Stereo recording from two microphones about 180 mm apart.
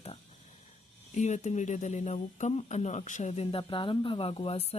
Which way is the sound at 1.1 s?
40° left (ahead or behind).